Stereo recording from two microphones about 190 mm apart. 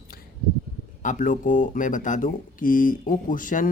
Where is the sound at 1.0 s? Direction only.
40° left (ahead or behind).